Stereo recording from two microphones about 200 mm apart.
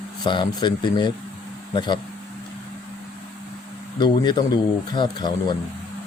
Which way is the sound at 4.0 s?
20° left (ahead or behind).